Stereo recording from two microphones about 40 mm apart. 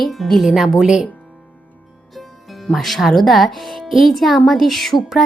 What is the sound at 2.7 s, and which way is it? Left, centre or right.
Speech, centre.